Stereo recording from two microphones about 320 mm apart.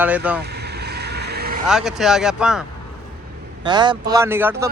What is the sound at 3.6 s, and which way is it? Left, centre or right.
Speech, centre.